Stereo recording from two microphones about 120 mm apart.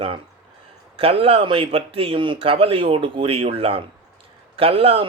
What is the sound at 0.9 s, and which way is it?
Speech, 55° right (ahead or behind).